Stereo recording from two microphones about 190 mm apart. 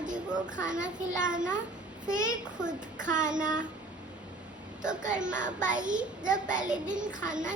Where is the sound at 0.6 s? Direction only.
40° right (ahead or behind).